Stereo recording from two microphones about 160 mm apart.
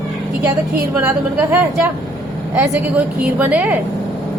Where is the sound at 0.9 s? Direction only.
15° right (ahead or behind).